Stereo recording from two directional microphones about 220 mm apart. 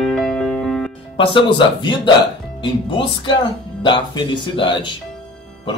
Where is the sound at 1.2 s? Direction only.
20° left (ahead or behind).